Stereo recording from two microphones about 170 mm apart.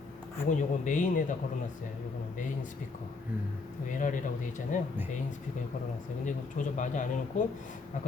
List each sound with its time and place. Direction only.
0.4 s speech: 45° left (ahead or behind)
3.9 s speech: 50° left (ahead or behind)
6.2 s speech: 45° left (ahead or behind)